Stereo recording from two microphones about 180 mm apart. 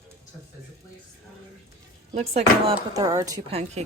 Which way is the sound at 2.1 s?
40° right (ahead or behind).